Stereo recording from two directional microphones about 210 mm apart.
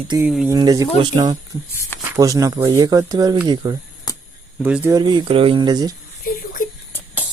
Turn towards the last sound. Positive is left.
turn(degrees=40)  # may be behind; listen again after turning